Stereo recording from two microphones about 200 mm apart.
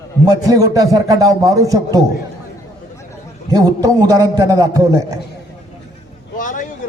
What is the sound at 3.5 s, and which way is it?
A man's voice, 20° right (ahead or behind).